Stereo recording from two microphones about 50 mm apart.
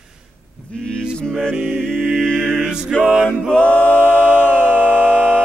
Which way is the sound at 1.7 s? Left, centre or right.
Right.